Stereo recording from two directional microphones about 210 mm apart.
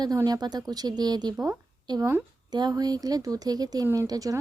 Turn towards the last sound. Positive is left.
turn(degrees=-15)  # may be behind; listen again after turning